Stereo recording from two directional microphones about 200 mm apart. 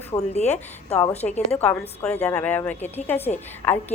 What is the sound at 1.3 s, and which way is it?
A woman's voice, 10° left (ahead or behind).